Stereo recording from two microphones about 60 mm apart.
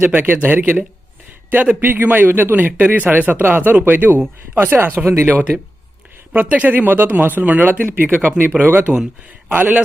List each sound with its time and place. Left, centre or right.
0.0 s a man's voice: right
5.0 s speech: right
5.3 s a man's voice: right
9.5 s a man's voice: right